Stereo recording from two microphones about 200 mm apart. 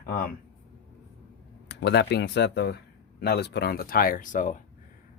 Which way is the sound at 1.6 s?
55° left (ahead or behind).